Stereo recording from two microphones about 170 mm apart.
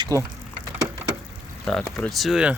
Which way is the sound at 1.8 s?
5° left (ahead or behind).